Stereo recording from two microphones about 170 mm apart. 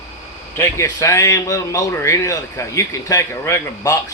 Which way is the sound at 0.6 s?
15° left (ahead or behind).